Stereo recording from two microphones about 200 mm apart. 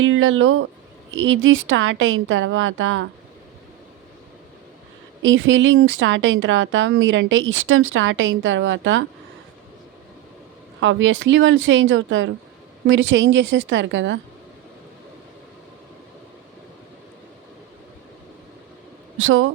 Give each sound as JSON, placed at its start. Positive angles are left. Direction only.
{"t": 0.0, "sound": "speech", "side_deg": -85}
{"t": 1.1, "sound": "a woman's voice", "side_deg": -75}
{"t": 5.2, "sound": "a woman's voice", "side_deg": -70}
{"t": 10.8, "sound": "a woman's voice", "side_deg": -70}
{"t": 19.2, "sound": "speech", "side_deg": -90}